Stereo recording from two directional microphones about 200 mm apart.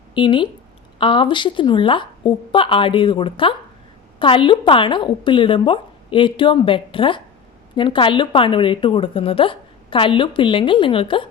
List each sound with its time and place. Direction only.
0.1 s a woman's voice: 25° left (ahead or behind)